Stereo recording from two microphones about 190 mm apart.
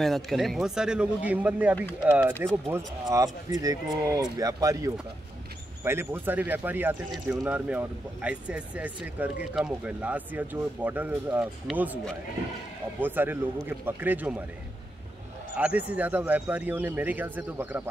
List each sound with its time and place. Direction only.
0.0 s a man's voice: centre (ahead or behind)
13.0 s speech: 10° right (ahead or behind)
15.5 s speech: 5° right (ahead or behind)